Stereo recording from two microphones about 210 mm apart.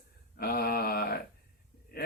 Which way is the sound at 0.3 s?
45° left (ahead or behind).